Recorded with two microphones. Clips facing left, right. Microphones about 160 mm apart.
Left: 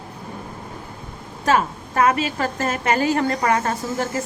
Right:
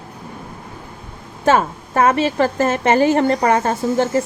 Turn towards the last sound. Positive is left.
turn(degrees=-25)  # may be behind; listen again after turning